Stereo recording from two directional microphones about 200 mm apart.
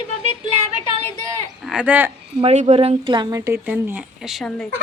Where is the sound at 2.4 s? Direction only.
30° right (ahead or behind); by 4.7 s centre (ahead or behind).